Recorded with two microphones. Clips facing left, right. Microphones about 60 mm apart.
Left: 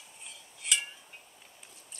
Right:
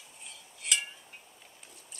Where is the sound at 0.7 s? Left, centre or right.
Centre.